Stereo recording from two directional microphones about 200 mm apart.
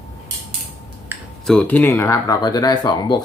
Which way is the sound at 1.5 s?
5° left (ahead or behind).